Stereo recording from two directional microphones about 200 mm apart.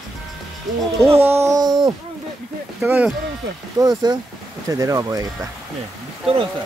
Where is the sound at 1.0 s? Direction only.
10° right (ahead or behind).